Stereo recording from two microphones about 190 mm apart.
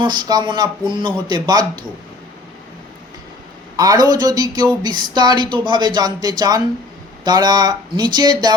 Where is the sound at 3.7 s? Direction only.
20° right (ahead or behind).